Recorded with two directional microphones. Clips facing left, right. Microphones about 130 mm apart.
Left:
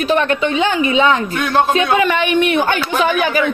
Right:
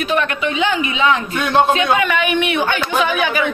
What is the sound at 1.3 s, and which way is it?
Speech, centre (ahead or behind).